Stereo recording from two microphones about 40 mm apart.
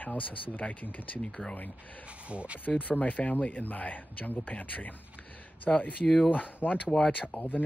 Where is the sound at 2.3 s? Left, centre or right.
Right.